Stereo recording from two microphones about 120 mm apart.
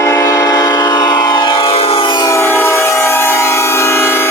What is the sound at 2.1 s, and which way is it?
Train, 25° left (ahead or behind).